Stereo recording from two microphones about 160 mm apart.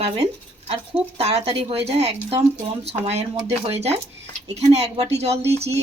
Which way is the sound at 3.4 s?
40° right (ahead or behind).